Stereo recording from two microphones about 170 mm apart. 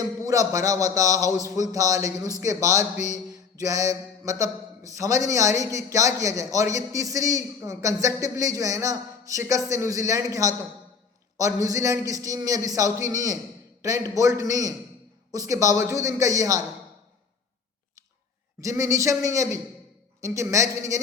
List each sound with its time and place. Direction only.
0.3 s speech: 20° right (ahead or behind)
18.6 s a man's voice: 20° right (ahead or behind)